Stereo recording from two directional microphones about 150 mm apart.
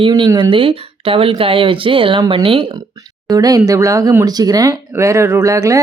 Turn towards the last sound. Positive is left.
turn(degrees=-20)  # may be behind; listen again after turning